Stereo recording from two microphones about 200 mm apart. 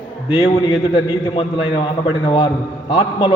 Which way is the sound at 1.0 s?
25° left (ahead or behind).